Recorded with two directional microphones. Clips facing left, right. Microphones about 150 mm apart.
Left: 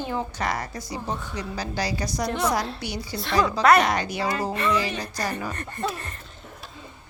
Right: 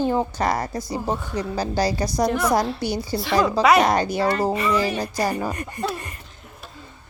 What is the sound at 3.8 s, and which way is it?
Speech, 35° right (ahead or behind).